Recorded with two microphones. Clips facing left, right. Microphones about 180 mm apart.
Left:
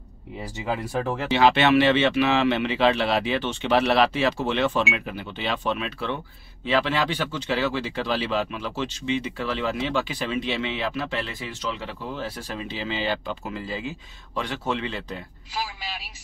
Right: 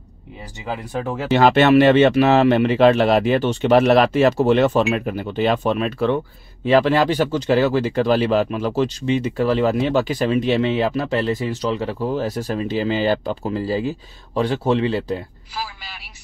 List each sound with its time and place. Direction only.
0.7 s speech: centre (ahead or behind)
1.3 s speech: 45° right (ahead or behind)